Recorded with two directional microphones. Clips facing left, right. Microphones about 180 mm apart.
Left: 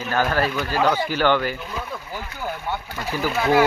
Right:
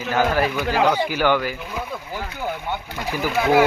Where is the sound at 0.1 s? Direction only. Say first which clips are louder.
Right 2 dB; 10° right (ahead or behind).